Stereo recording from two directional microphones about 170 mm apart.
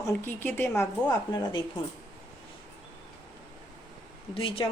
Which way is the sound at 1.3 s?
25° left (ahead or behind).